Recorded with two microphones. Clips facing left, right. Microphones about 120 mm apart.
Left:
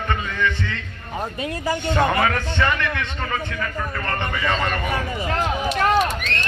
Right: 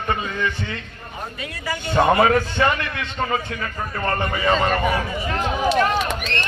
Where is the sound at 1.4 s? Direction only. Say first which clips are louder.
Left 5 dB; 40° left (ahead or behind).